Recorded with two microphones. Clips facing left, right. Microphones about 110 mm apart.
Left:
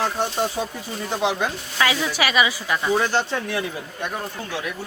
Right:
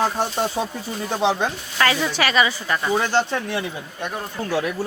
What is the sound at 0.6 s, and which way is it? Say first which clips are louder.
Speech: right 2 dB; 20° right (ahead or behind).